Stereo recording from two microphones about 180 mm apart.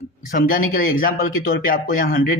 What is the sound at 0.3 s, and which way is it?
A man's voice, 50° left (ahead or behind).